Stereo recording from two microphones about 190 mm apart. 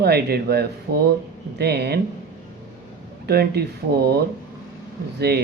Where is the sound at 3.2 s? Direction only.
55° right (ahead or behind).